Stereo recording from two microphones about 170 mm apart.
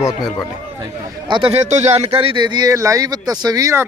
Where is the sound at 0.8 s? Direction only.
25° right (ahead or behind).